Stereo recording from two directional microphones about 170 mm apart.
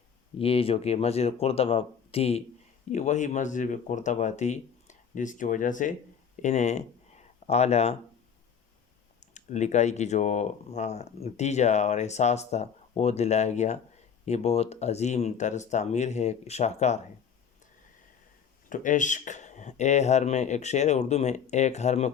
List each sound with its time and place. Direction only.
0.3 s speech: 35° left (ahead or behind)
9.2 s speech: 45° left (ahead or behind)
18.7 s speech: 50° left (ahead or behind)